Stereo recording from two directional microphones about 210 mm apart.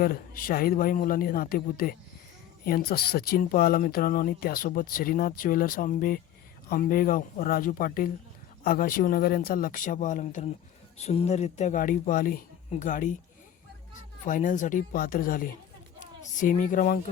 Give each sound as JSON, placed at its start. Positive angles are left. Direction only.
{"t": 0.0, "sound": "speech", "side_deg": 45}
{"t": 14.3, "sound": "speech", "side_deg": 40}